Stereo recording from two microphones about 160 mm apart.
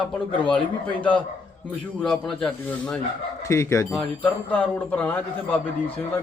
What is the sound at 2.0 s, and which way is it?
Speech, 5° left (ahead or behind).